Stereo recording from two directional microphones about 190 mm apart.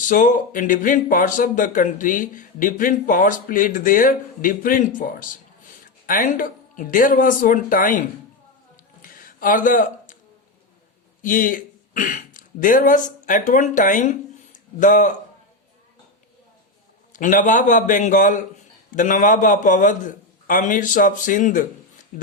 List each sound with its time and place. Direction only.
0.0 s speech: 45° left (ahead or behind)
9.0 s a sound: 45° left (ahead or behind)
11.2 s speech: 45° left (ahead or behind)
17.1 s speech: 45° left (ahead or behind)